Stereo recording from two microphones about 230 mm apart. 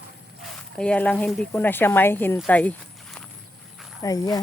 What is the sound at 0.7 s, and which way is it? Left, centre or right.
Speech, centre.